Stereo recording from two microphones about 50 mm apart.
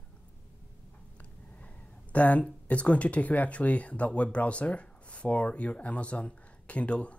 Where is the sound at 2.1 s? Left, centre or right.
Left.